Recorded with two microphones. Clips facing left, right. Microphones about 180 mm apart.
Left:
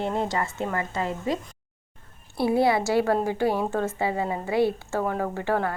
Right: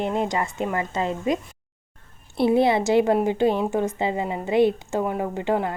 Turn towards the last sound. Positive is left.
turn(degrees=-20)  # may be behind; listen again after turning